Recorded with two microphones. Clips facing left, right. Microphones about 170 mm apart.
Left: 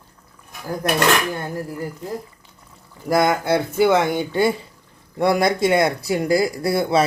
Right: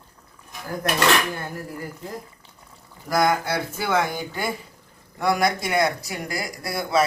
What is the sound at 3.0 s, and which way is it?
Speech, 25° left (ahead or behind).